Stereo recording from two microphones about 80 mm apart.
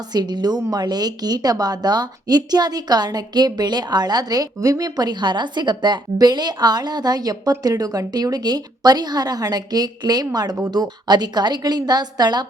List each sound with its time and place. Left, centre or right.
0.1 s speech: right